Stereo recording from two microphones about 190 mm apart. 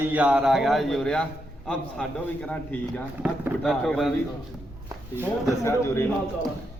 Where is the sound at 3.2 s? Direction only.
10° right (ahead or behind).